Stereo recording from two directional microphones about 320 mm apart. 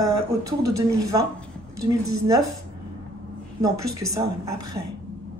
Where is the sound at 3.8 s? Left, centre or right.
Right.